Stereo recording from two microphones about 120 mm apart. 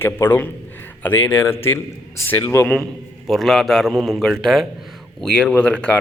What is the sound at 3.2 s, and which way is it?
A man's voice, centre (ahead or behind).